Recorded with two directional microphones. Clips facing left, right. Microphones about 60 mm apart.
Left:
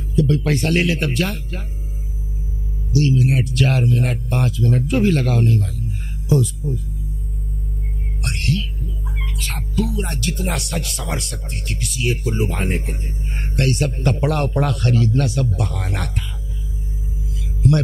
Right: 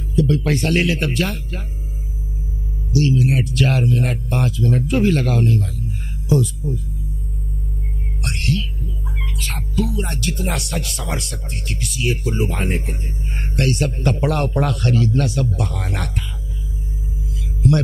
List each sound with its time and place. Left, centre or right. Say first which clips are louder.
0.1 s speech: even; right
3.0 s speech: even; right
8.2 s music: even; centre
9.2 s speech: even; right